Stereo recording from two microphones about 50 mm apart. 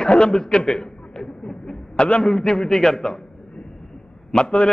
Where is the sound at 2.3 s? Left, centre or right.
Centre.